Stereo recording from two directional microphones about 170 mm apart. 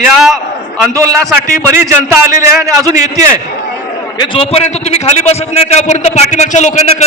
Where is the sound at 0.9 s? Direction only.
20° right (ahead or behind).